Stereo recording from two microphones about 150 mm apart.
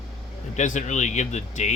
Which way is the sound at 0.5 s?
55° left (ahead or behind).